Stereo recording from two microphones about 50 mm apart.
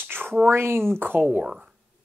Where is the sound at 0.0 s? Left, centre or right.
Right.